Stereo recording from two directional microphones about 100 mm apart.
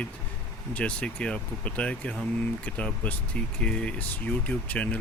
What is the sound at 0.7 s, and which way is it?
Speech, 10° left (ahead or behind).